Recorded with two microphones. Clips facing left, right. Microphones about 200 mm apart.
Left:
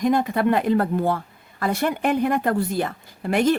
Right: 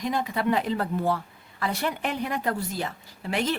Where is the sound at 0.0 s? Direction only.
50° left (ahead or behind).